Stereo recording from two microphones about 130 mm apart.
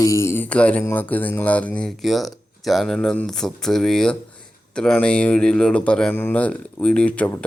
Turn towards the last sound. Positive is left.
turn(degrees=10)  # may be behind; listen again after turning